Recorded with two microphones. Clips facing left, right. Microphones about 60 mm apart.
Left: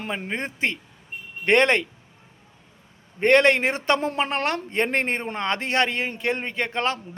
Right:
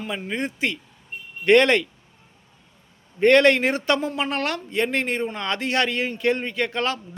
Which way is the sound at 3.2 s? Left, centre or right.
Left.